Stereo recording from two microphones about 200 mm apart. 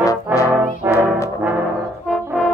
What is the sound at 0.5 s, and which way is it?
Brass instrument, 5° right (ahead or behind).